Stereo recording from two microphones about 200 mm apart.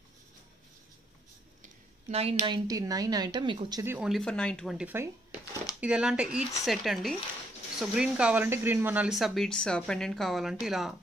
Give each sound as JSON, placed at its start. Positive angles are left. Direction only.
{"t": 1.6, "sound": "a woman's voice", "side_deg": -30}
{"t": 4.1, "sound": "speech", "side_deg": 5}